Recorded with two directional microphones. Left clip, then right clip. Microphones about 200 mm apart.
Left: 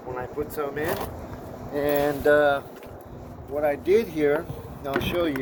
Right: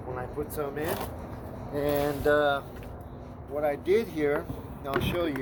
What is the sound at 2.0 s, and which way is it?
Speech, 20° left (ahead or behind).